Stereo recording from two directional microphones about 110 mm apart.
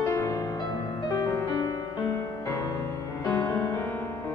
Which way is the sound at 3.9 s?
20° left (ahead or behind).